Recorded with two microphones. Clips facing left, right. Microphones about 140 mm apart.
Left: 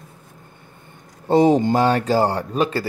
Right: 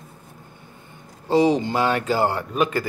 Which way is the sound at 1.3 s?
50° left (ahead or behind).